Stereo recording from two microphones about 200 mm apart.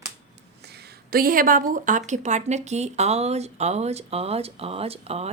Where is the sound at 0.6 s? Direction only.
55° right (ahead or behind).